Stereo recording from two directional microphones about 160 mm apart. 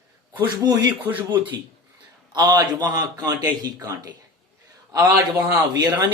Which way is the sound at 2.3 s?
25° right (ahead or behind).